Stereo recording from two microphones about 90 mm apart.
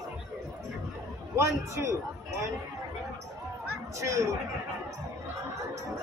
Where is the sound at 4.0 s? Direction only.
35° right (ahead or behind).